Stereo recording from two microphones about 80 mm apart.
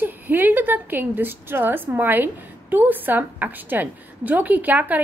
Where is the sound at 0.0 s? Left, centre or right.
Right.